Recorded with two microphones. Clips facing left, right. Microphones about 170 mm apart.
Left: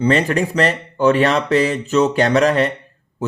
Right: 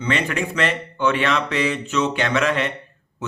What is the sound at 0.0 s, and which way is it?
Speech, 35° left (ahead or behind).